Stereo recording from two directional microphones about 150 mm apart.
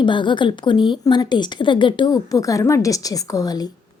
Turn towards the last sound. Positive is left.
turn(degrees=25)  # may be behind; listen again after turning